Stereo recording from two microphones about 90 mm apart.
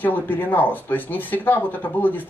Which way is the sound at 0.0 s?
20° left (ahead or behind).